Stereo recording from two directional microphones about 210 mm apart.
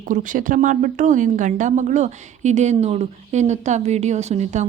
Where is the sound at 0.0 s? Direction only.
40° right (ahead or behind).